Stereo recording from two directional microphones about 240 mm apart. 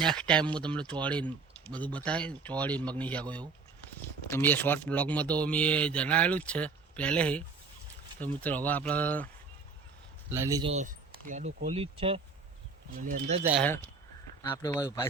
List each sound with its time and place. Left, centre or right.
0.0 s speech: centre
10.3 s speech: centre
10.7 s speech: right
13.0 s speech: right
13.6 s speech: centre